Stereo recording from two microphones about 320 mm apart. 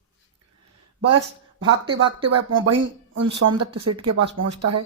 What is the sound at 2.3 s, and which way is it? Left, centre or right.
Speech, right.